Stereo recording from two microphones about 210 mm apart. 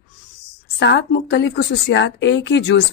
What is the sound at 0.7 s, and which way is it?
A woman's voice, 55° left (ahead or behind).